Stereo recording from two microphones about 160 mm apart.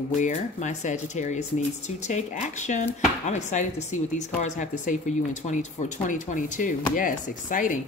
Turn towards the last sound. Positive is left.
turn(degrees=55)  # may be behind; listen again after turning